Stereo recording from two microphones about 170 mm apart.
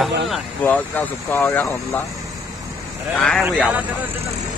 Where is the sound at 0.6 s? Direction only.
10° left (ahead or behind).